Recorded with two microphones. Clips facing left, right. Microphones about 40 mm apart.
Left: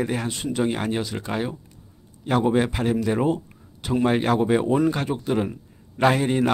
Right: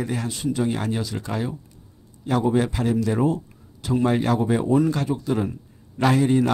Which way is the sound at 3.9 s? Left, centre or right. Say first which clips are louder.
Even; left.